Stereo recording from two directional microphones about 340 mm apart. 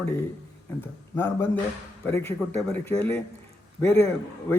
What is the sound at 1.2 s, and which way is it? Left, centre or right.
Speech, centre.